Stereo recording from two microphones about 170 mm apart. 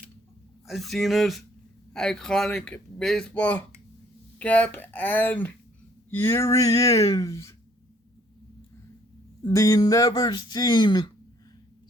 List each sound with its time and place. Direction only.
0.7 s speech: centre (ahead or behind); by 7.5 s 15° left (ahead or behind)
9.4 s speech: 20° left (ahead or behind)